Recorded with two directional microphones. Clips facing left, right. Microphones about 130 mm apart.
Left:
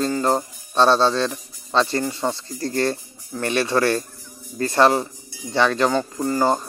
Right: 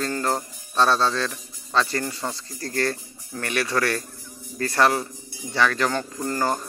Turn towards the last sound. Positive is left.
turn(degrees=15)  # may be behind; listen again after turning